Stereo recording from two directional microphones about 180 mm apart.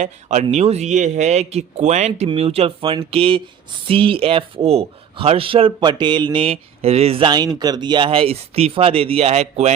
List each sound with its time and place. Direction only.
0.0 s speech: 40° right (ahead or behind)